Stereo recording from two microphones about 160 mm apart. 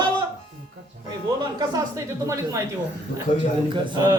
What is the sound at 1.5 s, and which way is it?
Speech, 20° right (ahead or behind).